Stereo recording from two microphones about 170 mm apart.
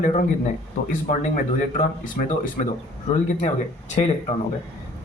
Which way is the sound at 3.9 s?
40° left (ahead or behind).